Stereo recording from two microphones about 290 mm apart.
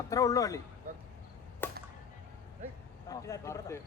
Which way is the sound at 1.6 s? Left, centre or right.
Centre.